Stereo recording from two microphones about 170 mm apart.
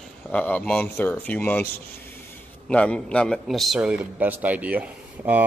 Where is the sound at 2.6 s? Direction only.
5° left (ahead or behind).